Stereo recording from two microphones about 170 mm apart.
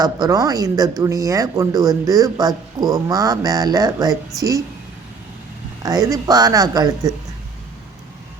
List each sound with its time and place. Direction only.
0.0 s speech: 20° right (ahead or behind)
5.8 s speech: 20° right (ahead or behind)